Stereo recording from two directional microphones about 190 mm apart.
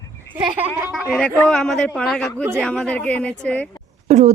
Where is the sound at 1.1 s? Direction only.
5° left (ahead or behind).